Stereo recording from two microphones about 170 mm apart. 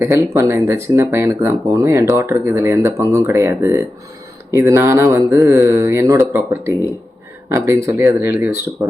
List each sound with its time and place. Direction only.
0.0 s speech: 15° right (ahead or behind)